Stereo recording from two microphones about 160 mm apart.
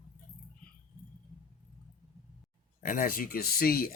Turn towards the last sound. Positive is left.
turn(degrees=65)  # may be behind; listen again after turning